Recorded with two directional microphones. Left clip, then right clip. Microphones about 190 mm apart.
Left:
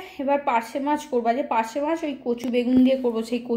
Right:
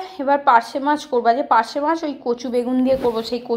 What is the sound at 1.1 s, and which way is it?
Speech, 40° right (ahead or behind).